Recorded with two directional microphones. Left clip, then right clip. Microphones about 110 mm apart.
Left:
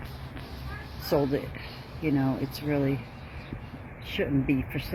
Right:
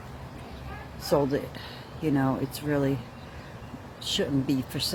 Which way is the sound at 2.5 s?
25° right (ahead or behind).